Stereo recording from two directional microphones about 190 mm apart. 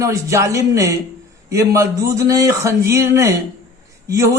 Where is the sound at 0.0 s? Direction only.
15° right (ahead or behind).